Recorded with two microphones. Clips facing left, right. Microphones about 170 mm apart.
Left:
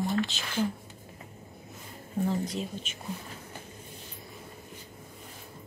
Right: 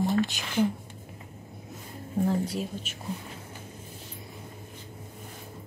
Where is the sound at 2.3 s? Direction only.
5° right (ahead or behind).